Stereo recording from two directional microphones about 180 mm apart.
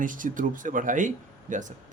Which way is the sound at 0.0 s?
45° right (ahead or behind).